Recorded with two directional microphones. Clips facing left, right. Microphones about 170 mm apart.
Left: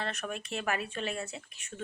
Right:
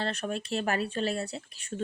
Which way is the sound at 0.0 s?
30° right (ahead or behind).